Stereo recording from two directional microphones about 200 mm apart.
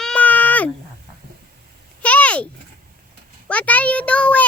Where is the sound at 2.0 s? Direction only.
5° left (ahead or behind).